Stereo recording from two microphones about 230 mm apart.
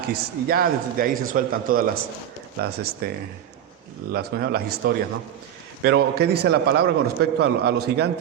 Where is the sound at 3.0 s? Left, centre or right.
Right.